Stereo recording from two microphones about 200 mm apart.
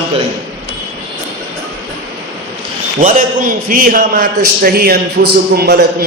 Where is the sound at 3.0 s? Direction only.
40° right (ahead or behind).